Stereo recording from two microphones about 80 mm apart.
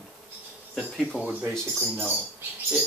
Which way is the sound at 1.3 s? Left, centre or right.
Right.